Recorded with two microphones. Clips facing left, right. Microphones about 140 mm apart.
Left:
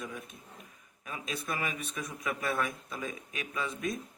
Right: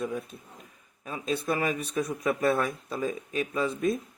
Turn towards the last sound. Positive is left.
turn(degrees=-30)  # may be behind; listen again after turning